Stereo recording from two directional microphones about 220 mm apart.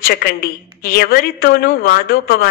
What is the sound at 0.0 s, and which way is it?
A woman's voice, 40° left (ahead or behind).